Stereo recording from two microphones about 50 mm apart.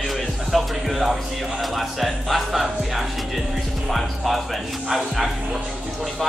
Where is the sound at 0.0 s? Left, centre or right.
Centre.